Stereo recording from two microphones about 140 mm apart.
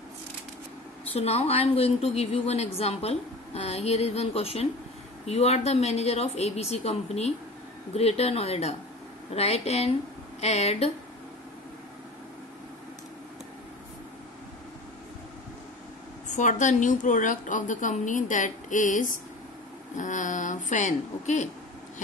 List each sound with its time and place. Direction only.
1.1 s a woman's voice: 50° left (ahead or behind)
16.3 s a woman's voice: 60° left (ahead or behind)